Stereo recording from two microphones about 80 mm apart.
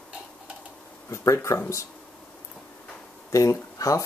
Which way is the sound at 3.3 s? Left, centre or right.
Left.